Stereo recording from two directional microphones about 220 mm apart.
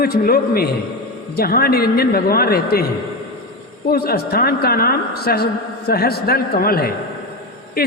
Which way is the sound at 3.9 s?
45° left (ahead or behind).